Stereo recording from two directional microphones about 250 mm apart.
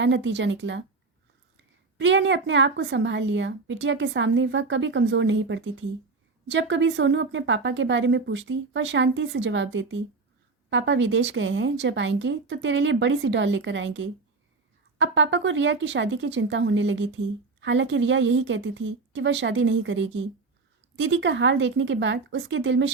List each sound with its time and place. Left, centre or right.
0.0 s a woman's voice: right
2.0 s a woman's voice: right